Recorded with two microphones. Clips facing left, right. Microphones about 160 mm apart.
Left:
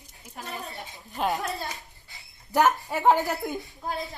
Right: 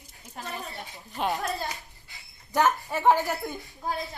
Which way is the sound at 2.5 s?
15° left (ahead or behind).